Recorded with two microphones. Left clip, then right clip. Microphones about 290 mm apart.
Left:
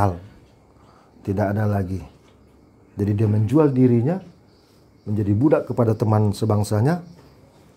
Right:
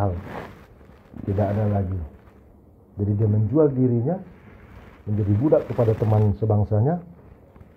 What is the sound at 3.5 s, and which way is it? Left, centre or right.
Speech, left.